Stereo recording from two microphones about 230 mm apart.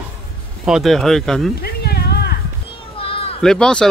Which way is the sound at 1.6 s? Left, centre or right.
Left.